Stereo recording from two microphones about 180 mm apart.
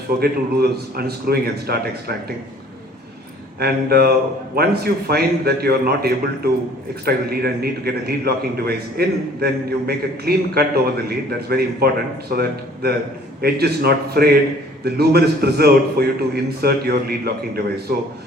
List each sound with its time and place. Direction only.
0.2 s a man's voice: 60° right (ahead or behind)
3.6 s a man's voice: 60° right (ahead or behind)